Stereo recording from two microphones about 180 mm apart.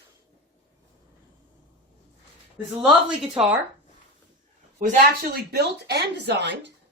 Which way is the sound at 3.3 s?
5° right (ahead or behind).